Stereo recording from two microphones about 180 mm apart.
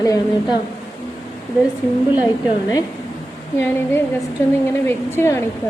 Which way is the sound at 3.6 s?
10° left (ahead or behind).